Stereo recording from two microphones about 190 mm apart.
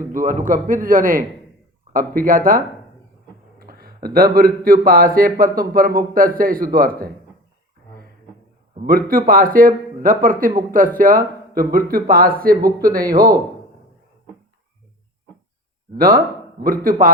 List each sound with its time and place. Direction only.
0.1 s a man's voice: 45° right (ahead or behind)
8.7 s a man's voice: 45° right (ahead or behind)
16.0 s a man's voice: 50° right (ahead or behind)